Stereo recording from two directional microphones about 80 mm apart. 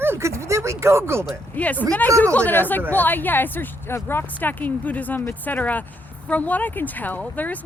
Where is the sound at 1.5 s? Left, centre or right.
Centre.